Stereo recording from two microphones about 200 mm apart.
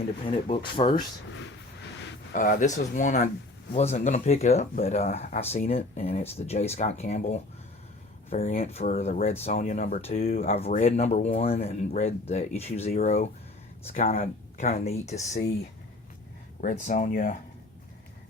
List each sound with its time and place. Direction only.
0.4 s speech: 30° left (ahead or behind)
2.3 s speech: 45° left (ahead or behind)
10.0 s speech: 30° left (ahead or behind)
16.6 s speech: 40° left (ahead or behind)